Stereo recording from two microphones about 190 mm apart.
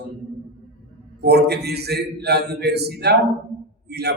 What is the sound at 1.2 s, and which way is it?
A man's voice, 60° right (ahead or behind).